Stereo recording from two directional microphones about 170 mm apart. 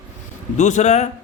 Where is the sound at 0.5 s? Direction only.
45° left (ahead or behind).